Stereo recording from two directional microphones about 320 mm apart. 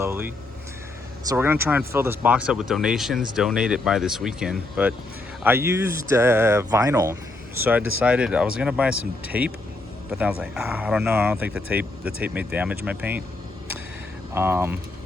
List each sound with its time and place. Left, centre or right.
0.0 s a man's voice: centre
14.3 s a man's voice: centre